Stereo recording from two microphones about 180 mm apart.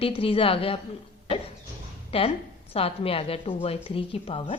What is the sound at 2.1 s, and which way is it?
A woman's voice, 30° left (ahead or behind).